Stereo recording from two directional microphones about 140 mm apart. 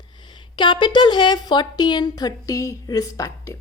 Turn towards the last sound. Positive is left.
turn(degrees=25)  # may be behind; listen again after turning